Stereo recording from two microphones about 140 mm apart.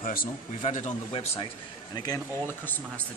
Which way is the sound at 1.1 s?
40° left (ahead or behind).